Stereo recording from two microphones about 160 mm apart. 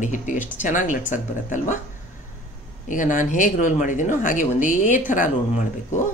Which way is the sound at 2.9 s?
55° left (ahead or behind).